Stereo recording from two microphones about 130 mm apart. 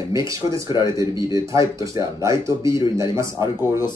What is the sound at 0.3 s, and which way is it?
Speech, 25° right (ahead or behind).